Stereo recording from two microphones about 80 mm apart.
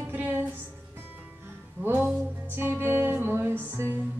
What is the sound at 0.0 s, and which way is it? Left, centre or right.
Music, right.